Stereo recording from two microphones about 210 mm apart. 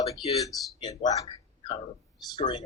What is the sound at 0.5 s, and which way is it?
Speech, centre (ahead or behind).